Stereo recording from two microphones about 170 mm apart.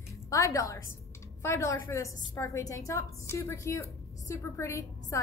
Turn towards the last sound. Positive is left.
turn(degrees=20)  # may be behind; listen again after turning